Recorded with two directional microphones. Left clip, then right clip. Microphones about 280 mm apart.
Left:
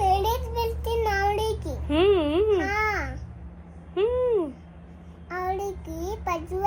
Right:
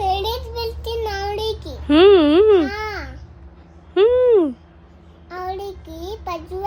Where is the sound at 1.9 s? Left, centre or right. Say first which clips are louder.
Right 10 dB; right.